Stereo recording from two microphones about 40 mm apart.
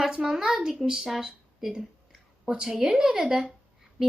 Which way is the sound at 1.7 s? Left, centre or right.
Centre.